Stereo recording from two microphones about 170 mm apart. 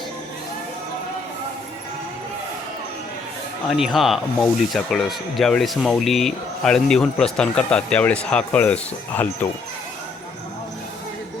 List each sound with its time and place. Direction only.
3.8 s speech: centre (ahead or behind)